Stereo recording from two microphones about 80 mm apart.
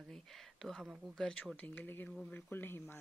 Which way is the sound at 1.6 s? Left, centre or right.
Centre.